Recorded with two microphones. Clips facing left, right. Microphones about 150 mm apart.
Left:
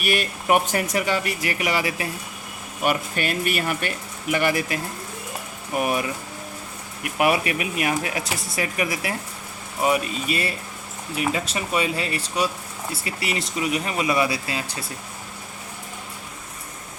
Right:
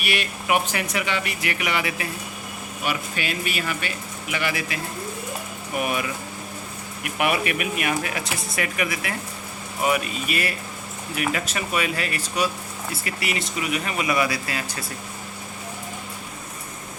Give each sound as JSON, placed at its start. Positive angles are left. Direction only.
{"t": 0.0, "sound": "speech", "side_deg": 45}
{"t": 2.8, "sound": "speech", "side_deg": 50}
{"t": 5.7, "sound": "speech", "side_deg": 35}
{"t": 7.2, "sound": "speech", "side_deg": 35}